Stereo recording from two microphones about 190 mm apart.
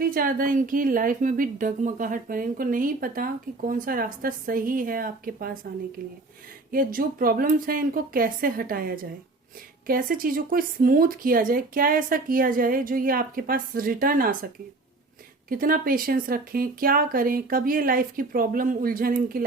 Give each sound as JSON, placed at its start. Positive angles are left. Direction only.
{"t": 0.0, "sound": "speech", "side_deg": -50}
{"t": 6.7, "sound": "speech", "side_deg": -45}
{"t": 15.4, "sound": "speech", "side_deg": -50}